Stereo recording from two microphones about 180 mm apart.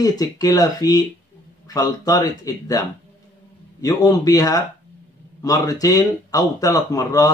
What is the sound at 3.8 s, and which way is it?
Speech, 20° left (ahead or behind).